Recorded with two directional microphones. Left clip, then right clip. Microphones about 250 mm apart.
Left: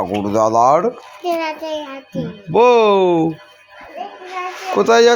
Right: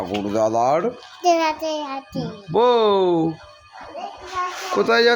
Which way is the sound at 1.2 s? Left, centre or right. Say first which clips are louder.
Right 2 dB; right.